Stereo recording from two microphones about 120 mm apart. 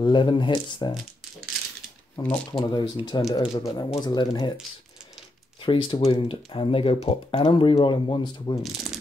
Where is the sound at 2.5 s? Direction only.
35° left (ahead or behind).